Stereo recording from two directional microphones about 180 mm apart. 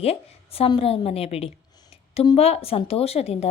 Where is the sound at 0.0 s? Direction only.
35° left (ahead or behind).